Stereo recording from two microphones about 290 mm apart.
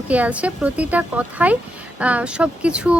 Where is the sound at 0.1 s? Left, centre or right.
Centre.